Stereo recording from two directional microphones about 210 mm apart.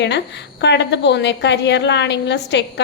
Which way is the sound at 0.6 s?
55° left (ahead or behind).